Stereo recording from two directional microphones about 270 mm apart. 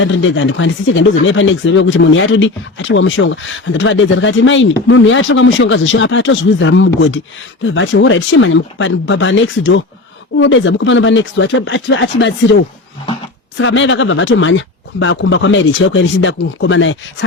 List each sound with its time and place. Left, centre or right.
0.0 s speech: left
13.6 s speech: left